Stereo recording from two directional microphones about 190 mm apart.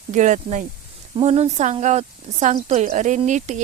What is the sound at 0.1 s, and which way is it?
Speech, 40° right (ahead or behind).